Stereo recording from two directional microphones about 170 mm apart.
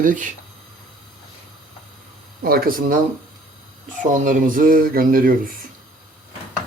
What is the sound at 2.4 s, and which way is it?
Speech, 60° right (ahead or behind).